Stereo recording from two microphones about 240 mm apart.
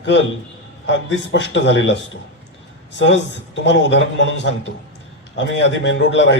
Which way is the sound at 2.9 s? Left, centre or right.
Left.